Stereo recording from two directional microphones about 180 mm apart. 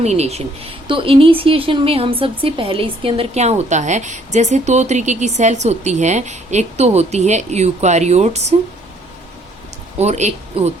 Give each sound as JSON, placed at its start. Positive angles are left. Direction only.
{"t": 0.0, "sound": "speech", "side_deg": -35}
{"t": 10.0, "sound": "speech", "side_deg": -40}